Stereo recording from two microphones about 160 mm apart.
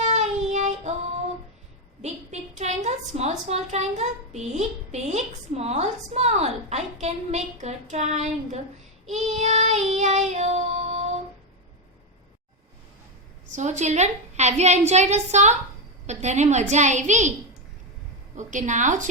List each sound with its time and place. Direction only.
0.0 s child singing: 45° right (ahead or behind)
2.0 s a woman's voice: 45° right (ahead or behind)
13.5 s a woman's voice: 45° right (ahead or behind)
18.3 s a woman's voice: 50° right (ahead or behind)